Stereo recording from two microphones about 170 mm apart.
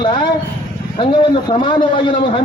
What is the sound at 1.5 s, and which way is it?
Speech, 30° left (ahead or behind).